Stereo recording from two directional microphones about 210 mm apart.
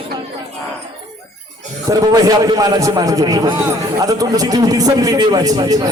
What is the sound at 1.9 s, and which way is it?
A man's voice, 15° right (ahead or behind).